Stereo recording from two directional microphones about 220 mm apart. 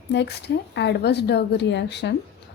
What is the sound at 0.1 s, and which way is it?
Speech, 50° left (ahead or behind).